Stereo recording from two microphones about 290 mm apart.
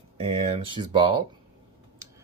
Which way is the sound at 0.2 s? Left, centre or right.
Centre.